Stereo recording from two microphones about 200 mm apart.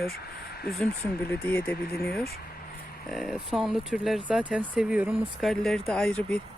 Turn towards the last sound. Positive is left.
turn(degrees=5)  # may be behind; listen again after turning